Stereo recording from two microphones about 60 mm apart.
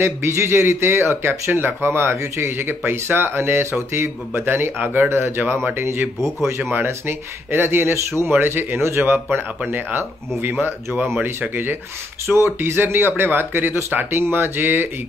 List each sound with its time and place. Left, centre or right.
0.0 s speech: right
4.7 s speech: right